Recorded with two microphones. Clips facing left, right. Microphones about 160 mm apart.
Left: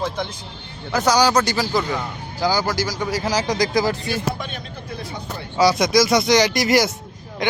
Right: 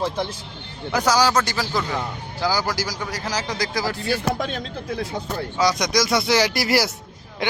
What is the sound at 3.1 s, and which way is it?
Speech, 10° left (ahead or behind).